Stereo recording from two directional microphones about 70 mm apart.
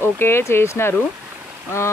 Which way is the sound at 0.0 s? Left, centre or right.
Left.